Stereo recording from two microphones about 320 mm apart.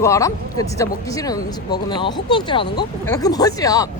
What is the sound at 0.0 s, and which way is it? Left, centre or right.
Speech, centre.